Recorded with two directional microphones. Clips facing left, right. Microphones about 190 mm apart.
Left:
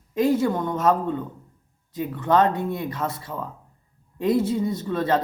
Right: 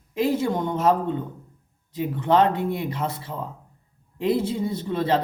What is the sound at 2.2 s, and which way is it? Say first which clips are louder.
Speech: even; 15° right (ahead or behind).